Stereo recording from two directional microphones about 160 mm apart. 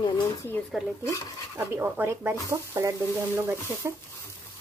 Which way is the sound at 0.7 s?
5° right (ahead or behind).